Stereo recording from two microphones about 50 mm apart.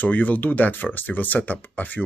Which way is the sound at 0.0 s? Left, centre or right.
Left.